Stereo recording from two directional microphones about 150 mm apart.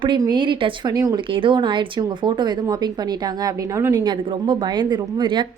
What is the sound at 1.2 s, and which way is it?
Speech, 35° right (ahead or behind).